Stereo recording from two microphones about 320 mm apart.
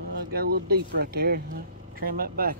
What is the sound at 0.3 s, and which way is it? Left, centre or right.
Speech, right.